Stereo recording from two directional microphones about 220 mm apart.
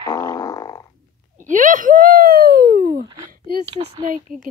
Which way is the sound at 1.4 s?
35° right (ahead or behind).